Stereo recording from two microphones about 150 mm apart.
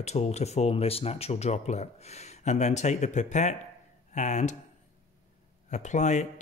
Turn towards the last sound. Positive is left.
turn(degrees=50)  # may be behind; listen again after turning